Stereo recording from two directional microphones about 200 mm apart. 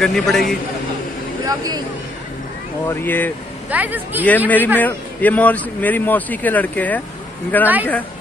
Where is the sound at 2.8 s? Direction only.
10° left (ahead or behind).